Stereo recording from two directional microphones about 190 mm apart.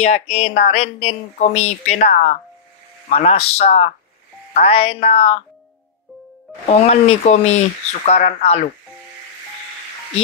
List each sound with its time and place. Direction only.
0.0 s speech: 35° left (ahead or behind)
6.7 s speech: 35° left (ahead or behind)